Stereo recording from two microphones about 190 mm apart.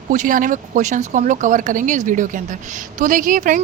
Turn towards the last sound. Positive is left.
turn(degrees=-45)  # may be behind; listen again after turning